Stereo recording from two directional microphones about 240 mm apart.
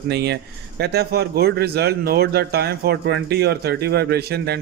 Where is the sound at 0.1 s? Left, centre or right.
Right.